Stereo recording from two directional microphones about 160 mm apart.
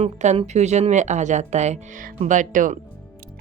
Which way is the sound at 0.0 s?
40° right (ahead or behind).